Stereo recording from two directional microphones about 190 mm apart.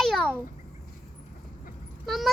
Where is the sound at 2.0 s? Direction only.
Centre (ahead or behind).